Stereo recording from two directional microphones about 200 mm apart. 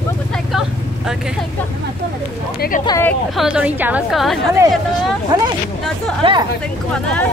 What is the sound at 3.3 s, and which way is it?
A woman's voice, 5° right (ahead or behind).